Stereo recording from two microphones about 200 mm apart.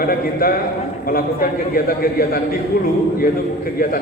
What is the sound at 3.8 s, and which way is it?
Speech, 45° left (ahead or behind).